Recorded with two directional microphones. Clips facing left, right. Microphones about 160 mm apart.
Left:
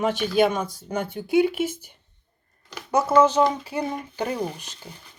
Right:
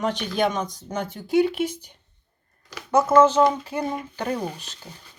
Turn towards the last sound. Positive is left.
turn(degrees=10)  # may be behind; listen again after turning